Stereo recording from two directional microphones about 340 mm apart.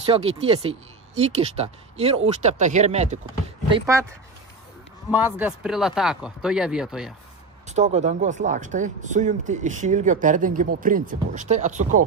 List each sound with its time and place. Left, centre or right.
0.0 s speech: centre
5.1 s speech: centre
7.6 s speech: centre